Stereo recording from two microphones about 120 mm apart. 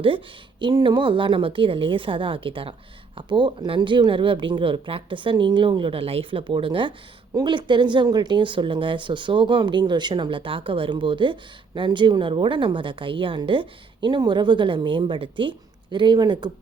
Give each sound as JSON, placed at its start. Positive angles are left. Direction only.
{"t": 0.6, "sound": "speech", "side_deg": -40}